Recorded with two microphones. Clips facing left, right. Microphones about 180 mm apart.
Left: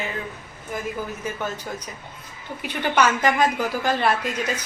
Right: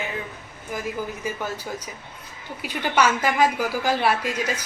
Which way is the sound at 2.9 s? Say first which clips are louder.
Left 1 dB; 10° right (ahead or behind).